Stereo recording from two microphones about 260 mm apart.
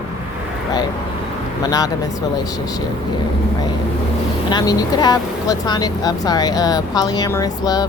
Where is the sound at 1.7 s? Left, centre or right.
Centre.